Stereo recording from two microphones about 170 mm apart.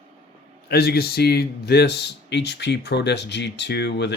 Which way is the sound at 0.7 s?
70° left (ahead or behind).